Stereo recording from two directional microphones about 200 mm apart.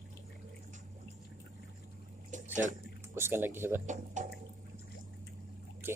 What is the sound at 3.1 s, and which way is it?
Speech, 10° right (ahead or behind).